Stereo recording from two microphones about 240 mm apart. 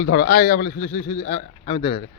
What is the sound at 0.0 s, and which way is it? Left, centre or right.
A man's voice, left.